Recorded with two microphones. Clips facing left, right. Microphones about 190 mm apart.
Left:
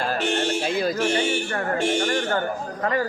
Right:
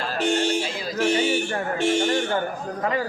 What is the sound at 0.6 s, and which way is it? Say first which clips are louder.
Music: left 6 dB; 55° left (ahead or behind).